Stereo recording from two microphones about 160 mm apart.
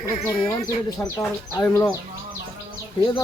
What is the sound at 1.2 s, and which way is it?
Speech, 15° left (ahead or behind).